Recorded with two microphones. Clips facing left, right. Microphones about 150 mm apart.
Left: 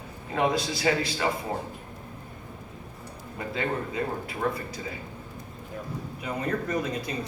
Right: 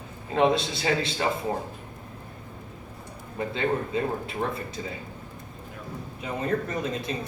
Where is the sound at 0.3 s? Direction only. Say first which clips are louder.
Right 3 dB; 25° right (ahead or behind).